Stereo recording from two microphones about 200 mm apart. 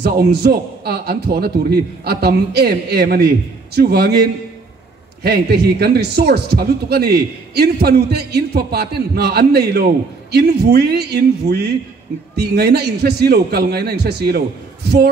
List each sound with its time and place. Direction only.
0.0 s speech: 55° right (ahead or behind)
5.2 s speech: 55° right (ahead or behind)